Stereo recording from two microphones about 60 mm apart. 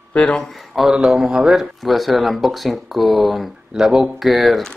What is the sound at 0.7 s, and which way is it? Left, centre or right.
Speech, centre.